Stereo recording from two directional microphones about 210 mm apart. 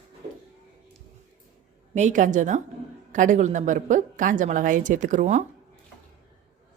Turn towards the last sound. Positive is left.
turn(degrees=-35)  # may be behind; listen again after turning